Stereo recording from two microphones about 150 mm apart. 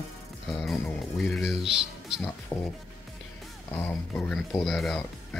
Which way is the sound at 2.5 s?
15° left (ahead or behind).